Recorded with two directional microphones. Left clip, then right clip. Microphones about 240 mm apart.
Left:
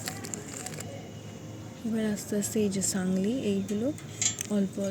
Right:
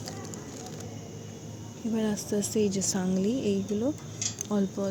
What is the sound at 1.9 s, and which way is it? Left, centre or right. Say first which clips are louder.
Speech: right 2 dB; centre.